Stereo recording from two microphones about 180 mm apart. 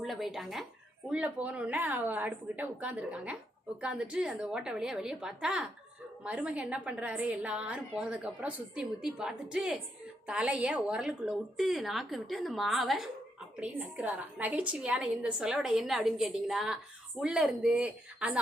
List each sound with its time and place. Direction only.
0.0 s a woman's voice: centre (ahead or behind)